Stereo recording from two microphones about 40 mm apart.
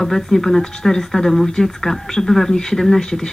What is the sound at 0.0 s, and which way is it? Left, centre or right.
Speech, centre.